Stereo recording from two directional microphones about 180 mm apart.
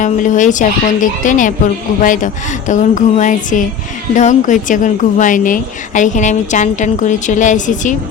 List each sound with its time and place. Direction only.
0.0 s a woman's voice: 45° left (ahead or behind)